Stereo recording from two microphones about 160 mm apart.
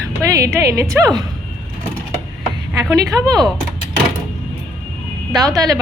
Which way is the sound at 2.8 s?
20° right (ahead or behind).